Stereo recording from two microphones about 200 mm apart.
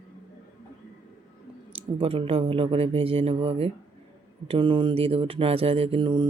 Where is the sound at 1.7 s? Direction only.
30° right (ahead or behind).